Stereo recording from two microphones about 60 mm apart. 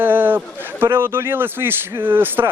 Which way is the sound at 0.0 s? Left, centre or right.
Right.